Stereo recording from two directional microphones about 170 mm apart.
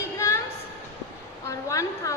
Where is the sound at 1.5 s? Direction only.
20° left (ahead or behind).